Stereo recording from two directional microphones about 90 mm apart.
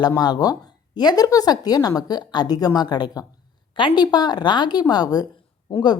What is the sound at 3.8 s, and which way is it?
Speech, 60° left (ahead or behind).